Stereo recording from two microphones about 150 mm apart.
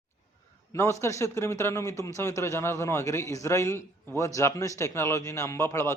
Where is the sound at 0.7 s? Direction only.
20° left (ahead or behind).